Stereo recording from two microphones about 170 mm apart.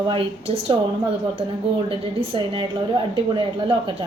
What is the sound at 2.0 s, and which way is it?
Speech, 30° right (ahead or behind).